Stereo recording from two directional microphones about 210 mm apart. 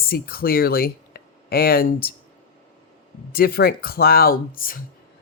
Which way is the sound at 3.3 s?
45° left (ahead or behind).